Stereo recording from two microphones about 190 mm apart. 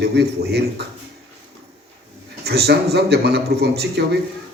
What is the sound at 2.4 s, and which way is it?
A man's voice, 60° right (ahead or behind).